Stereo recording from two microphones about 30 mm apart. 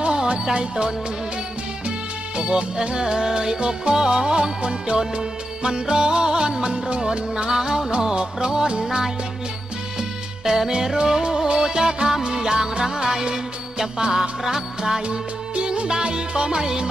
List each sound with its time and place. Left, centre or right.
0.0 s music: right
1.9 s music: right
8.8 s music: centre
15.0 s music: right